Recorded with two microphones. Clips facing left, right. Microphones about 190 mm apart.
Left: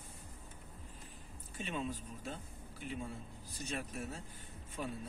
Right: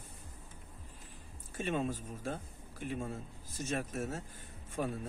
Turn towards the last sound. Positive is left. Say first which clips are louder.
# right 5 dB
turn(degrees=-45)  # may be behind; listen again after turning